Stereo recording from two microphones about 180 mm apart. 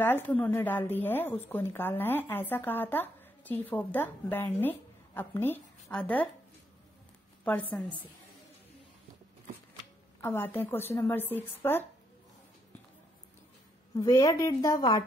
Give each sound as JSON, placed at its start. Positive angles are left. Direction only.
{"t": 0.0, "sound": "a woman's voice", "side_deg": 10}
{"t": 10.2, "sound": "a woman's voice", "side_deg": 10}
{"t": 13.9, "sound": "a woman's voice", "side_deg": 20}